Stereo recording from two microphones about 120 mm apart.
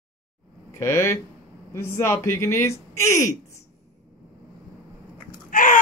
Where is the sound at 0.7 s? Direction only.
20° left (ahead or behind).